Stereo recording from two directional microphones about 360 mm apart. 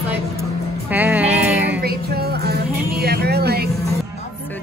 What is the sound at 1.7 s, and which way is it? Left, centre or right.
Music, right.